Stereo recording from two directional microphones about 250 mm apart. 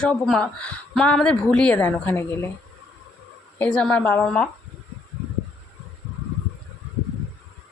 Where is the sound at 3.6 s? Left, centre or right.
Centre.